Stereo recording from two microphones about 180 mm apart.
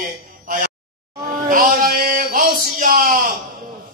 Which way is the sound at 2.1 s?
55° right (ahead or behind).